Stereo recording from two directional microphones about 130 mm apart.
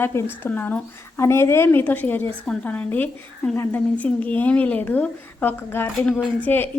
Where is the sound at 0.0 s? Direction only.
20° left (ahead or behind).